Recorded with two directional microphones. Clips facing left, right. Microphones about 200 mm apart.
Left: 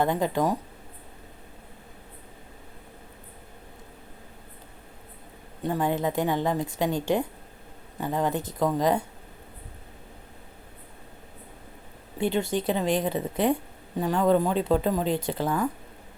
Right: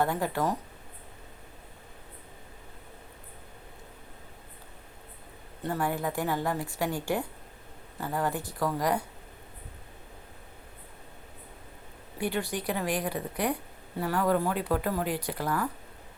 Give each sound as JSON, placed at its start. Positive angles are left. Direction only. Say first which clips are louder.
{"t": 0.0, "sound": "speech", "louder": "left 4 dB", "side_deg": 20}
{"t": 5.6, "sound": "speech", "louder": "left 4 dB", "side_deg": 15}
{"t": 12.1, "sound": "speech", "louder": "left 5 dB", "side_deg": 25}